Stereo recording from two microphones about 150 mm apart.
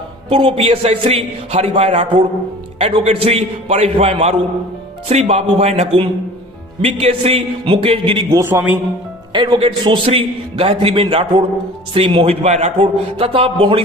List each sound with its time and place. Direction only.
0.3 s a man's voice: 40° right (ahead or behind)
8.4 s a man's voice: 20° right (ahead or behind)
9.3 s a man's voice: 35° right (ahead or behind)